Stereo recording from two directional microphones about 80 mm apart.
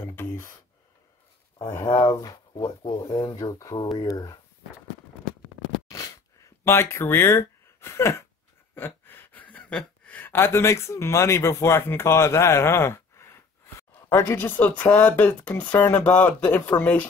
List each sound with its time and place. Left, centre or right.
0.1 s sigh: left
2.0 s speech: left
5.9 s a sound: left
8.7 s gasp: left
10.3 s speech: left